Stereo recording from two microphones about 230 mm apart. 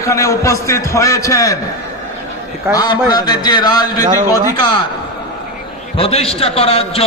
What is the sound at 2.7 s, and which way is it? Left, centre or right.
A man's voice, centre.